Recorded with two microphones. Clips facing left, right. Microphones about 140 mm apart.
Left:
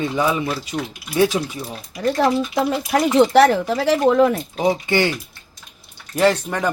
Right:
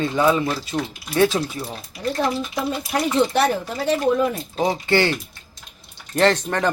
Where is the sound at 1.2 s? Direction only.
15° left (ahead or behind).